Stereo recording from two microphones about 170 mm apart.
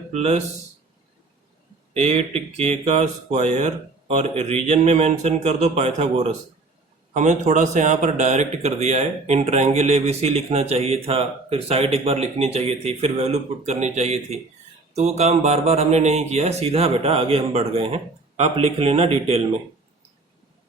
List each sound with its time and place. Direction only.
0.1 s a man's voice: 40° right (ahead or behind)
1.9 s a man's voice: 40° right (ahead or behind)